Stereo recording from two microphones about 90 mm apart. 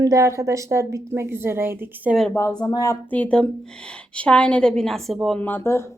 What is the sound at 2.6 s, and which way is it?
Speech, 45° left (ahead or behind).